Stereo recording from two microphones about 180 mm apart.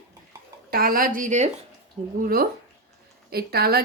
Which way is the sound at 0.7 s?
55° right (ahead or behind).